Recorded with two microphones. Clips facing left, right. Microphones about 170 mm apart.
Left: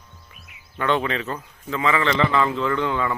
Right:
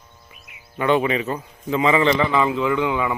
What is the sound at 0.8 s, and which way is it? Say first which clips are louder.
A man's voice: right 4 dB; 10° right (ahead or behind).